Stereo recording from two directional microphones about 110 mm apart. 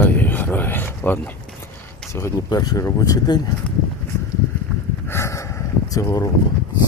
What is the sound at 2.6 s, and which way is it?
Speech, 35° left (ahead or behind).